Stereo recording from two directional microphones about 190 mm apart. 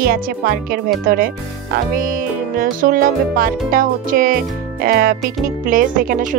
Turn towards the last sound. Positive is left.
turn(degrees=-45)  # may be behind; listen again after turning